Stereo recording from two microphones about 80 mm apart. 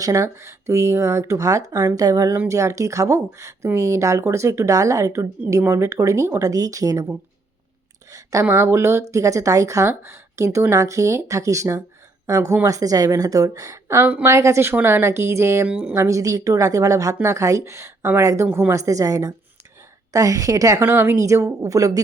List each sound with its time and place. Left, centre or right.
0.0 s a woman's voice: right
8.1 s speech: right
8.4 s a woman's voice: right
15.6 s speech: centre
16.0 s a woman's voice: right
20.8 s speech: right